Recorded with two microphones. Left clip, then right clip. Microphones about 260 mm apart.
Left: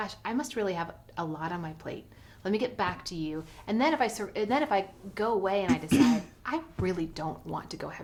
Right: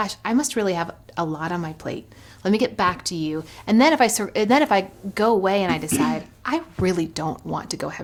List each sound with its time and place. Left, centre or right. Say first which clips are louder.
0.0 s a woman's voice: right 10 dB; right